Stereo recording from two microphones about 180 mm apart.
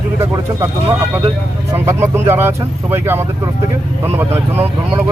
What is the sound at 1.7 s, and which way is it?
Speech, 15° right (ahead or behind).